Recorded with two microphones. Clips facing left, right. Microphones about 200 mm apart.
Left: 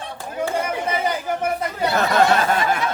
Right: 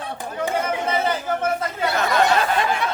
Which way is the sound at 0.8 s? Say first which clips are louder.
Even; 15° left (ahead or behind).